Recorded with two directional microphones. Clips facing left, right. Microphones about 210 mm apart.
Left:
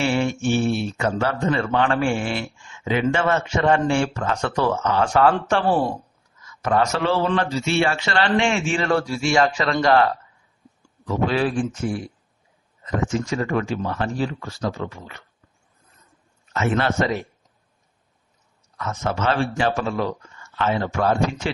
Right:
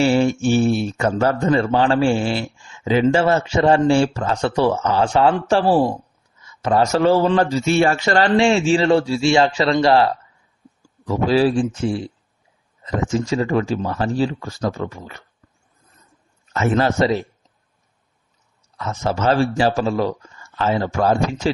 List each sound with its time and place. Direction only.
0.0 s a man's voice: 35° right (ahead or behind)
16.5 s speech: 40° right (ahead or behind)
18.8 s speech: 30° right (ahead or behind)